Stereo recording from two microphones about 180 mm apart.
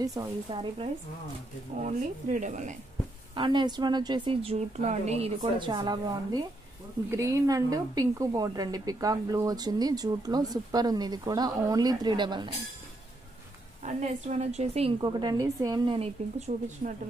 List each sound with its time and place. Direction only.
0.0 s speech: 20° right (ahead or behind)
1.8 s speech: 40° right (ahead or behind)
3.3 s speech: 25° right (ahead or behind)
13.8 s speech: 40° right (ahead or behind); by 16.0 s 20° right (ahead or behind)
16.0 s speech: 40° right (ahead or behind)